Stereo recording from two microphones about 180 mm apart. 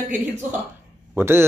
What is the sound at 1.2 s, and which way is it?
Speech, 15° right (ahead or behind).